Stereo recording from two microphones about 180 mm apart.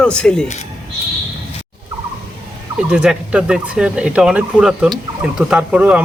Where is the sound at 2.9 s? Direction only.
5° right (ahead or behind).